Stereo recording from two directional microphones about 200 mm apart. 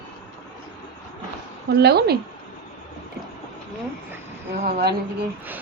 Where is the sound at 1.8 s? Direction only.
50° right (ahead or behind).